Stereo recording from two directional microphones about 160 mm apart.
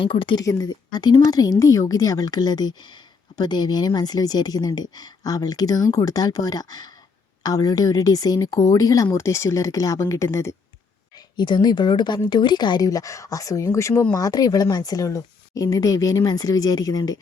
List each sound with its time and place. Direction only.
0.0 s speech: 30° left (ahead or behind)
11.3 s speech: 30° left (ahead or behind)